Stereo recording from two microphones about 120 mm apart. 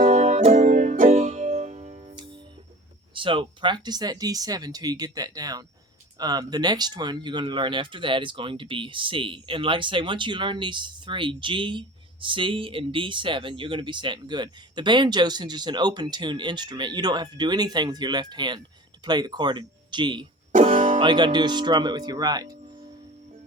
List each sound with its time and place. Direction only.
0.0 s music: 80° right
2.1 s music: 45° right (ahead or behind)
3.2 s speech: 45° right (ahead or behind)
20.5 s music: 90° right
21.0 s speech: 40° right (ahead or behind)